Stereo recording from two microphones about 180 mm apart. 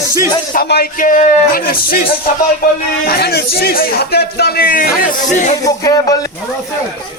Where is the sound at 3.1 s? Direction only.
65° left (ahead or behind); by 5.5 s 45° left (ahead or behind).